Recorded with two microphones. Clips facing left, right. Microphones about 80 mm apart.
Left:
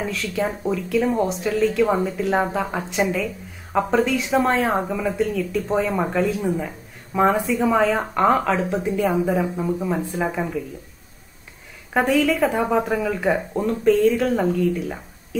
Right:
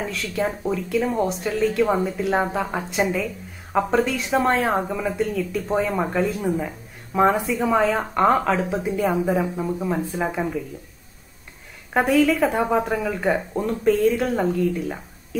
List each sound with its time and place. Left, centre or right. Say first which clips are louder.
0.0 s speech: left 1 dB; centre
11.9 s speech: right 1 dB; centre